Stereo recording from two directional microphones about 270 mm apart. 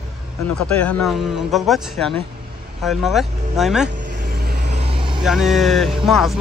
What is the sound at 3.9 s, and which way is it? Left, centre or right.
Vehicle, right.